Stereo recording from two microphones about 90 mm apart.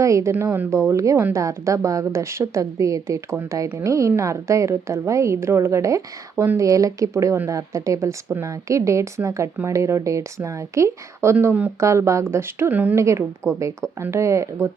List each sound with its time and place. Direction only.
0.0 s a woman's voice: 35° right (ahead or behind); by 13.0 s 20° right (ahead or behind)
13.0 s a woman's voice: 35° right (ahead or behind)